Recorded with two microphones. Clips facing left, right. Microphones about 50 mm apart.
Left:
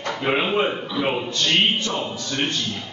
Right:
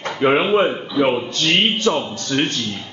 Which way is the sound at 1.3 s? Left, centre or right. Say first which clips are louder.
Right 2 dB; right.